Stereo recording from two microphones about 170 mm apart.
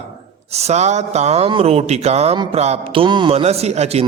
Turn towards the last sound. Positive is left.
turn(degrees=-40)  # may be behind; listen again after turning